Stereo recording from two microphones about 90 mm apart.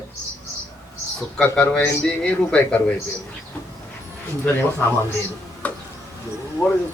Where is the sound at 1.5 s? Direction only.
15° left (ahead or behind).